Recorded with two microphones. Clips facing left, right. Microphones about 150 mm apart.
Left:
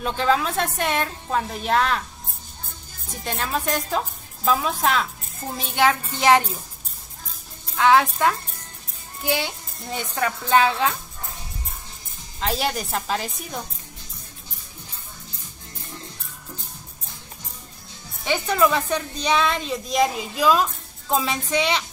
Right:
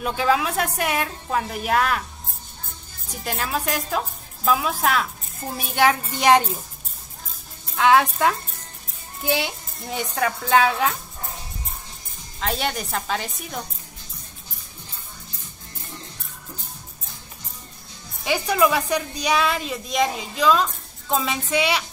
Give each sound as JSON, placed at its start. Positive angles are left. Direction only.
{"t": 0.0, "sound": "a woman's voice", "side_deg": -5}
{"t": 3.3, "sound": "a woman's voice", "side_deg": -5}
{"t": 7.8, "sound": "a woman's voice", "side_deg": -15}
{"t": 9.2, "sound": "a child's voice", "side_deg": -15}
{"t": 12.4, "sound": "a woman's voice", "side_deg": 0}
{"t": 18.2, "sound": "a woman's voice", "side_deg": -10}